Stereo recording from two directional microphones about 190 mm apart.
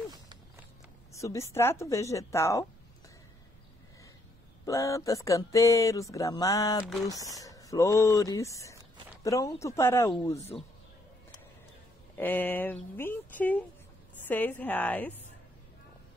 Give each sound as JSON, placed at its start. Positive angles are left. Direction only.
{"t": 1.1, "sound": "speech", "side_deg": 15}
{"t": 4.6, "sound": "speech", "side_deg": 15}
{"t": 6.8, "sound": "speech", "side_deg": 0}
{"t": 7.1, "sound": "speech", "side_deg": 20}
{"t": 12.2, "sound": "speech", "side_deg": 10}